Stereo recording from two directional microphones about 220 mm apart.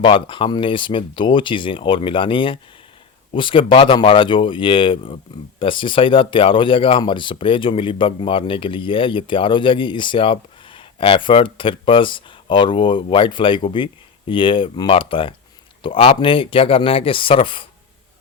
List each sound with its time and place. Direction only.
0.0 s speech: 25° left (ahead or behind)